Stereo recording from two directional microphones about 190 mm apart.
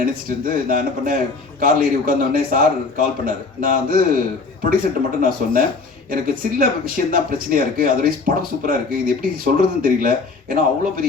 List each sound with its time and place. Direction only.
0.0 s speech: 50° right (ahead or behind)